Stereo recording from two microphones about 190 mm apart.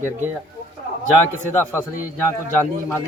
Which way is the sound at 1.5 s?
10° left (ahead or behind).